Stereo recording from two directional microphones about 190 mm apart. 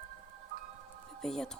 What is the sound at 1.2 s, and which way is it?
Speech, centre (ahead or behind).